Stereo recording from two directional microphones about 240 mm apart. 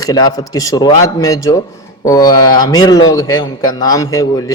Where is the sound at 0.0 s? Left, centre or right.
Centre.